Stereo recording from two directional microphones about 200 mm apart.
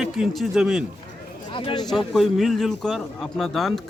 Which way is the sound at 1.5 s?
25° left (ahead or behind).